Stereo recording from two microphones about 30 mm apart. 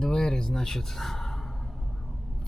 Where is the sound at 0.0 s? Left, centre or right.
Centre.